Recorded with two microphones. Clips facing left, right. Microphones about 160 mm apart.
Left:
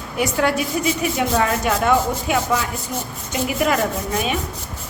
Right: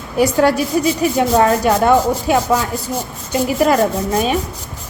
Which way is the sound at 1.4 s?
40° right (ahead or behind).